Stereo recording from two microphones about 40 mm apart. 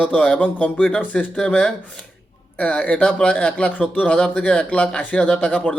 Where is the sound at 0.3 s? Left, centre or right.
Left.